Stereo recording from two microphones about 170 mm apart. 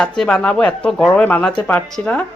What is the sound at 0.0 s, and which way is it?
A woman's voice, 5° left (ahead or behind).